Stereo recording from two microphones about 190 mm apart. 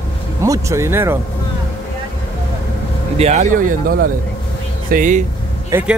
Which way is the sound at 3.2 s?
35° right (ahead or behind).